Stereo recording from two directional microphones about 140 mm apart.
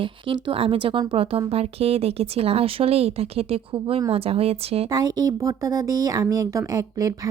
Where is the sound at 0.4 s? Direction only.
40° right (ahead or behind).